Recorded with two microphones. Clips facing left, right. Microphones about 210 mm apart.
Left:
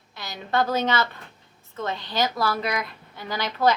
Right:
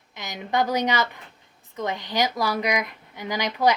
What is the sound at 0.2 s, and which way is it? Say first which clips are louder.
A woman's voice: even; 15° right (ahead or behind).